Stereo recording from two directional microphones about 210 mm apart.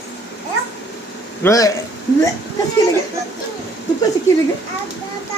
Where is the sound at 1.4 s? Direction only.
15° left (ahead or behind).